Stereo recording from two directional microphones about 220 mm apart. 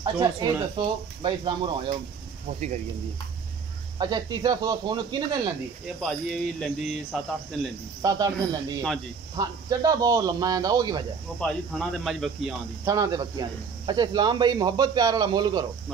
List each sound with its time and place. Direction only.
0.0 s speech: 20° right (ahead or behind)
4.0 s speech: 20° right (ahead or behind)
5.9 s speech: centre (ahead or behind)
8.0 s speech: 15° right (ahead or behind)
11.3 s speech: centre (ahead or behind)
12.8 s speech: 15° right (ahead or behind)